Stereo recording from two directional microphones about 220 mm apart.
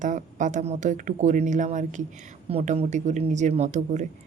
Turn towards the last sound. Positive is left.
turn(degrees=-30)  # may be behind; listen again after turning